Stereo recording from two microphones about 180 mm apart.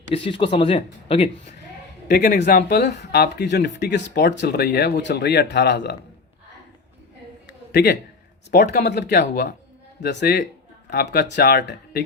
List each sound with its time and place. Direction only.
0.1 s speech: 30° left (ahead or behind)
2.0 s speech: 60° left (ahead or behind)
2.4 s speech: 50° left (ahead or behind); by 6.0 s 75° left (ahead or behind)
7.4 s a sound: 70° left (ahead or behind)
8.4 s speech: 65° left (ahead or behind)